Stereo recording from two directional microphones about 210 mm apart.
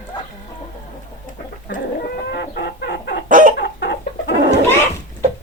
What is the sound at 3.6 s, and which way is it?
Chicken, 55° left (ahead or behind).